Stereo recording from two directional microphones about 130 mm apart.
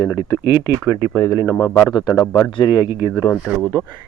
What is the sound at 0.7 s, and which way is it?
Speech, 25° right (ahead or behind).